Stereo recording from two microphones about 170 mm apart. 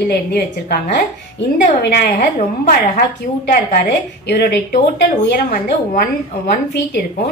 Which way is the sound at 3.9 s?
75° left (ahead or behind).